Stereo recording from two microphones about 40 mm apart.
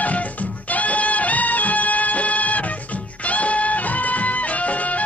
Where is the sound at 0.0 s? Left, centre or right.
Left.